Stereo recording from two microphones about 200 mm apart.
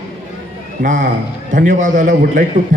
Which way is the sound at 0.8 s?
40° right (ahead or behind).